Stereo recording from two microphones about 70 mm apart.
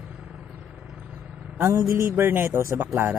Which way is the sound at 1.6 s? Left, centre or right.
Right.